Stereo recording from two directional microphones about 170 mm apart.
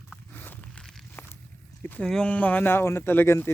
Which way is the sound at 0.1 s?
10° left (ahead or behind).